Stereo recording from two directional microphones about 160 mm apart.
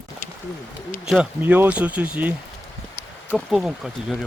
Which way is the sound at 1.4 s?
10° right (ahead or behind).